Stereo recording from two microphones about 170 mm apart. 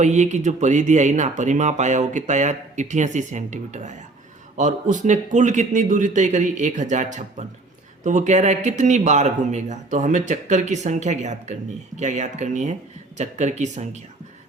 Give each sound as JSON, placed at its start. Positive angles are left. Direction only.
{"t": 0.0, "sound": "speech", "side_deg": -45}